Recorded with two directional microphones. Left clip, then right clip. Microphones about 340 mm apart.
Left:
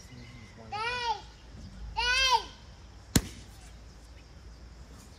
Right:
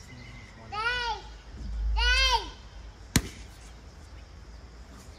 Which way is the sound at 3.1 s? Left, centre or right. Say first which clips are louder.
Right 1 dB; centre.